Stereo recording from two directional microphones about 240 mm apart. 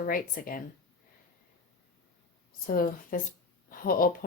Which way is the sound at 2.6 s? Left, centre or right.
Left.